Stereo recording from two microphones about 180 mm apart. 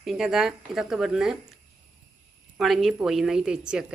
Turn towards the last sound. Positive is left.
turn(degrees=-5)  # may be behind; listen again after turning